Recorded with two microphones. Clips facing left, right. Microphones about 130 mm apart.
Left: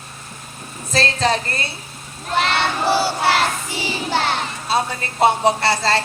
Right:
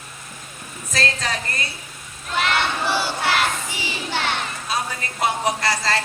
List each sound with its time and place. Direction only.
0.9 s a sound: 30° left (ahead or behind)
2.3 s child singing: 30° left (ahead or behind)
4.7 s music: 30° left (ahead or behind)
5.2 s speech: 30° left (ahead or behind)